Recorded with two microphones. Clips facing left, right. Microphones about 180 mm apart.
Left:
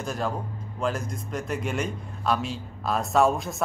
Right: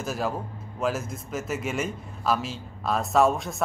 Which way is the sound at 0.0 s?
5° right (ahead or behind).